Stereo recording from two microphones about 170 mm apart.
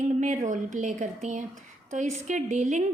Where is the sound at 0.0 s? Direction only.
45° right (ahead or behind).